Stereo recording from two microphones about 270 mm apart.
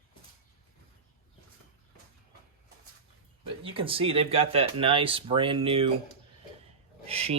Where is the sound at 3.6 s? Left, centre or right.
Centre.